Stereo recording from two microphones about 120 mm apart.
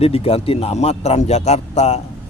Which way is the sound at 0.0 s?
55° left (ahead or behind).